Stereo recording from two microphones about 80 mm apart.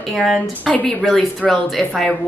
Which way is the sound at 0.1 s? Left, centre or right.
Centre.